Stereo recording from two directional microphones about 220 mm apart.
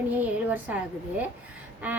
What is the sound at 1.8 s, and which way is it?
Speech, 5° right (ahead or behind).